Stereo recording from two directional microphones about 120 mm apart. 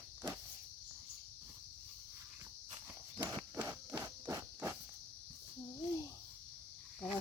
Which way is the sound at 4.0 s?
25° right (ahead or behind).